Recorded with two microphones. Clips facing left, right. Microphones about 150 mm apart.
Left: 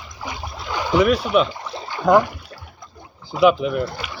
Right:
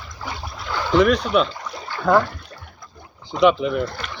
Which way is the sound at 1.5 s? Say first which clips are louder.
Left 2 dB; 30° left (ahead or behind).